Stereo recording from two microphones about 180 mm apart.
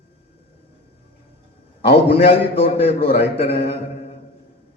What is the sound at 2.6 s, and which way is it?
A man's voice, 35° left (ahead or behind).